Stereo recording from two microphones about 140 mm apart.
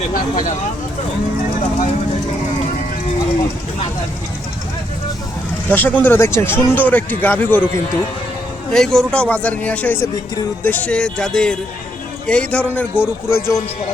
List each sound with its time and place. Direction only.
5.6 s speech: 10° left (ahead or behind)
8.7 s speech: 5° left (ahead or behind); by 13.6 s 20° left (ahead or behind)